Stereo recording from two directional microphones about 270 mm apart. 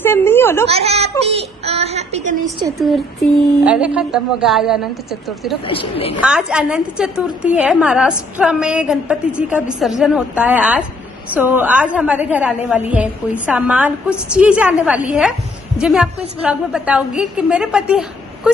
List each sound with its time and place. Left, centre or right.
0.0 s a woman's voice: centre
0.7 s a child's voice: right
2.8 s a woman's voice: centre
5.7 s a woman's voice: centre
6.2 s a woman's voice: centre